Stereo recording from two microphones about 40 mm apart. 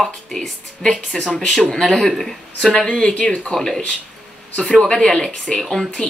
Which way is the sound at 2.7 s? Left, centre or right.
Left.